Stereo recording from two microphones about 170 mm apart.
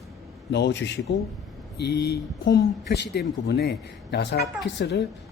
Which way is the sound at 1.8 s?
75° left (ahead or behind).